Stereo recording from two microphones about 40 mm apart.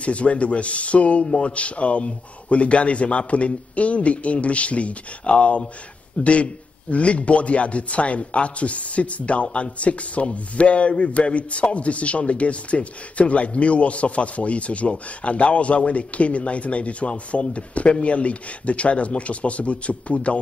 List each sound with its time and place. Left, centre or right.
0.0 s a man's voice: left